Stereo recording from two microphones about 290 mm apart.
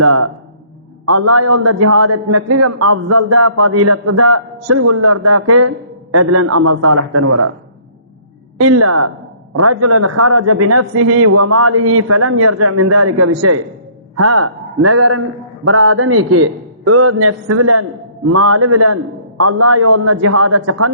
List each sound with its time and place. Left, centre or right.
0.0 s a man's voice: right
8.5 s a man's voice: right